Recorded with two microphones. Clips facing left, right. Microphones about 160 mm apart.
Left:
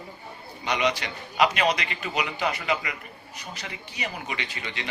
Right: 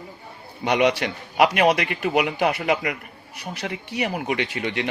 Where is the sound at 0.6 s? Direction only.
60° right (ahead or behind).